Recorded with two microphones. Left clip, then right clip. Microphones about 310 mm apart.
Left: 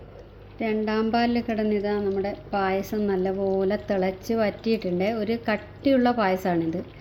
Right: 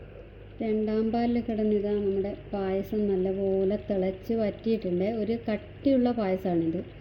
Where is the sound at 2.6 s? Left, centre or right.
Centre.